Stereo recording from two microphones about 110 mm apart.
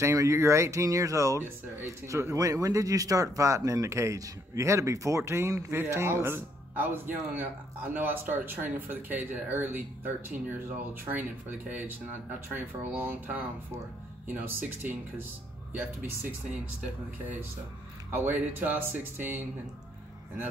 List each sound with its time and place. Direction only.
0.0 s speech: 30° right (ahead or behind)
18.1 s speech: 15° right (ahead or behind)